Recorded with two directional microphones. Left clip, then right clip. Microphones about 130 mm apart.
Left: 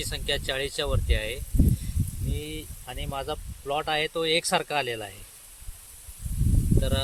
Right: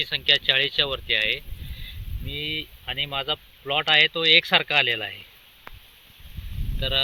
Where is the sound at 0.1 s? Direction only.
30° left (ahead or behind).